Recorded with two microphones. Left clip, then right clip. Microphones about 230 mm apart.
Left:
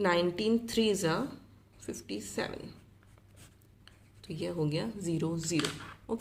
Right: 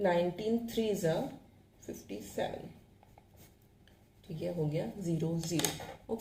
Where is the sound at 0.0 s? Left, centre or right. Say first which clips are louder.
Left 2 dB; left.